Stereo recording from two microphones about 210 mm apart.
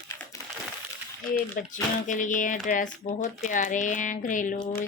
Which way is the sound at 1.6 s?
40° left (ahead or behind).